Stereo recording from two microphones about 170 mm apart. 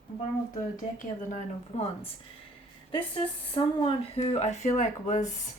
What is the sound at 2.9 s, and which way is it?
A woman's voice, 30° left (ahead or behind).